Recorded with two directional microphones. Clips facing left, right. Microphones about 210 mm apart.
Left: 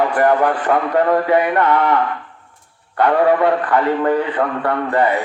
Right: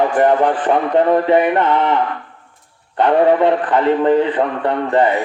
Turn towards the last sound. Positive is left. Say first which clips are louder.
# right 2 dB
turn(degrees=-20)  # may be behind; listen again after turning